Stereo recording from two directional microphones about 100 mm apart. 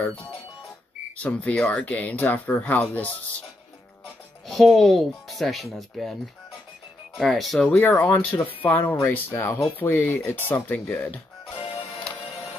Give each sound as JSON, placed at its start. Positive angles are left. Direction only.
{"t": 1.1, "sound": "speech", "side_deg": 15}
{"t": 4.5, "sound": "speech", "side_deg": 0}
{"t": 7.2, "sound": "speech", "side_deg": 0}
{"t": 7.7, "sound": "speech", "side_deg": 20}